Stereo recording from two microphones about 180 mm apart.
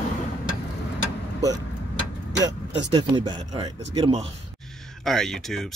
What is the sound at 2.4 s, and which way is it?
Speech, 25° right (ahead or behind).